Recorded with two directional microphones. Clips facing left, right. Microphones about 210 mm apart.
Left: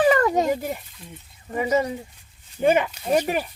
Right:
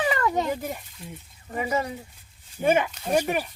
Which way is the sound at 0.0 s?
45° left (ahead or behind).